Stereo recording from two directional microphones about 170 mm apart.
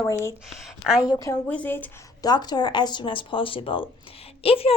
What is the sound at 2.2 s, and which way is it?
Speech, 25° left (ahead or behind).